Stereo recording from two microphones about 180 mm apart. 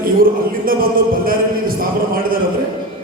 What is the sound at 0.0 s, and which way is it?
A man's voice, 55° right (ahead or behind).